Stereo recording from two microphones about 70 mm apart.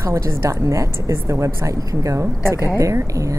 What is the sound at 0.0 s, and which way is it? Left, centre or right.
A woman's voice, right.